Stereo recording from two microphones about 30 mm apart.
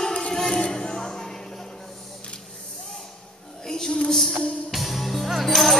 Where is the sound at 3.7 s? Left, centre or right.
Centre.